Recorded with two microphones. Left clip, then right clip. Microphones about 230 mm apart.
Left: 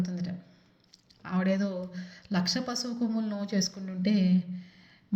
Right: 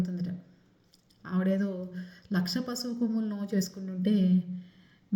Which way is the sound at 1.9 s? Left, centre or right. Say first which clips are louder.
Left 1 dB; left.